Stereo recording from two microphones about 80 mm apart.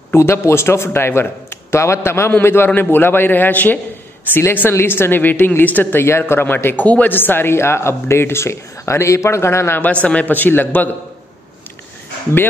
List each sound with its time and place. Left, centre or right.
0.1 s a man's voice: left
9.8 s speech: centre